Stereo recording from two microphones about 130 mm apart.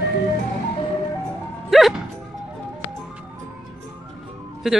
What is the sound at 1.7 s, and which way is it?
Music, centre (ahead or behind).